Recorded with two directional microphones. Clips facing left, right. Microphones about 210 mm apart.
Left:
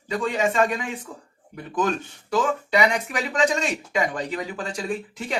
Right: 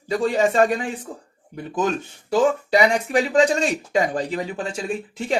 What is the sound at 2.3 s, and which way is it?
Speech, 30° right (ahead or behind).